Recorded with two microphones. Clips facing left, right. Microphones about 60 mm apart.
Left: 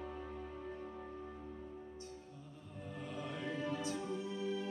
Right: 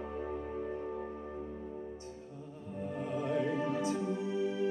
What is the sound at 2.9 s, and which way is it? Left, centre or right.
Music, right.